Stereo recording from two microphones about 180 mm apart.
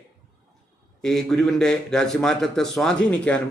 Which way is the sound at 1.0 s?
5° left (ahead or behind).